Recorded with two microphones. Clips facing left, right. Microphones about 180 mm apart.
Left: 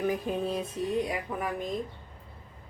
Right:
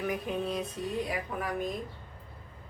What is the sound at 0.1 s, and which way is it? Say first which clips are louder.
Music: left 2 dB; 30° left (ahead or behind).